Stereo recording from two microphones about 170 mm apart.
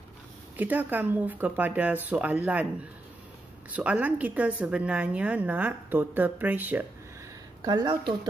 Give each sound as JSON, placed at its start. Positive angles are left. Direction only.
{"t": 0.6, "sound": "a woman's voice", "side_deg": -10}
{"t": 3.7, "sound": "a woman's voice", "side_deg": -10}
{"t": 7.6, "sound": "speech", "side_deg": -25}